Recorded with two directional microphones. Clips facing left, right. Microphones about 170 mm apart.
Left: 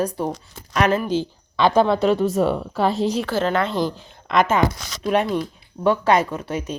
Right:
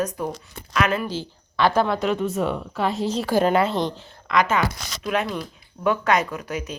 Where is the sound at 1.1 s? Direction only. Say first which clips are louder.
Left 8 dB; 20° left (ahead or behind); by 3.0 s 35° left (ahead or behind).